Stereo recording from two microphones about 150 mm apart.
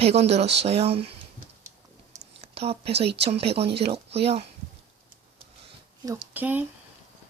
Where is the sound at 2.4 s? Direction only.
40° right (ahead or behind).